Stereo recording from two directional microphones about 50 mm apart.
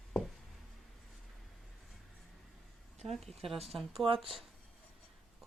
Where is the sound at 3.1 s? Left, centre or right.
Centre.